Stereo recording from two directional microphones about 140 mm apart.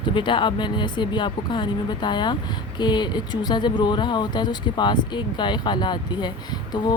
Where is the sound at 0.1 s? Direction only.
35° left (ahead or behind).